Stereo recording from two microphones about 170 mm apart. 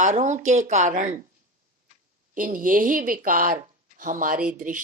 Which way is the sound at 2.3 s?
50° right (ahead or behind).